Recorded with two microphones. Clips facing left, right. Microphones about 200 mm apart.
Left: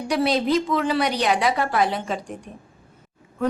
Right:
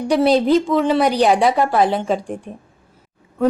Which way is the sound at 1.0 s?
35° right (ahead or behind).